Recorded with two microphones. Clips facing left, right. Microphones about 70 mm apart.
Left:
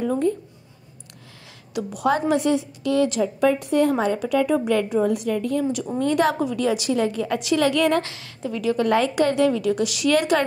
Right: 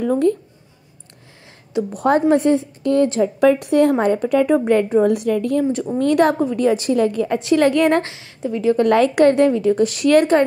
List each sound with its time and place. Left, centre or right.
2.0 s a woman's voice: right
3.3 s a woman's voice: right
4.0 s a woman's voice: right
5.1 s a woman's voice: right
6.4 s a woman's voice: right
7.2 s a woman's voice: right
7.5 s a woman's voice: right
8.0 s a woman's voice: right
8.8 s a woman's voice: right
9.5 s a woman's voice: right